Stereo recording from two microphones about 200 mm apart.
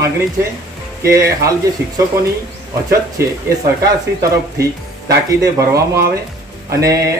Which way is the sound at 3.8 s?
15° right (ahead or behind).